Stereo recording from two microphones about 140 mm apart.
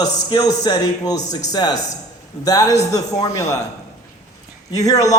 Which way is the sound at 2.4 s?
25° left (ahead or behind).